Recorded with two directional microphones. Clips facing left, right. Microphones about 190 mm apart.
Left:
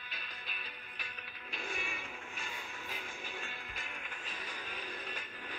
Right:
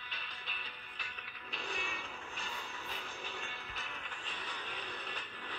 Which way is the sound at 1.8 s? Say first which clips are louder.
Even; 10° left (ahead or behind).